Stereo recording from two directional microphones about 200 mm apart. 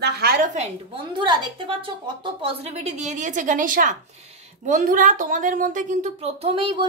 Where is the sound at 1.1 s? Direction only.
25° right (ahead or behind).